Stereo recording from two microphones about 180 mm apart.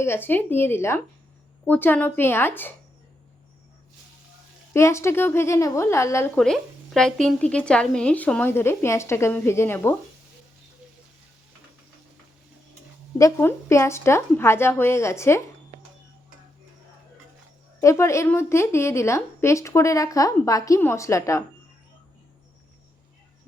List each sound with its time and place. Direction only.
0.0 s a woman's voice: 10° left (ahead or behind)
4.7 s a woman's voice: 15° left (ahead or behind)
6.3 s a woman's voice: 5° left (ahead or behind)
13.1 s a woman's voice: 15° left (ahead or behind)
17.7 s a woman's voice: 15° left (ahead or behind)